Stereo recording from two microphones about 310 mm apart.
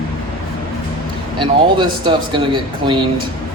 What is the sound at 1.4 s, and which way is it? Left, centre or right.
Speech, centre.